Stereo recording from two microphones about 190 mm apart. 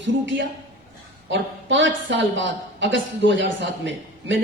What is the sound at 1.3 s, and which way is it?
A woman's voice, 70° right (ahead or behind).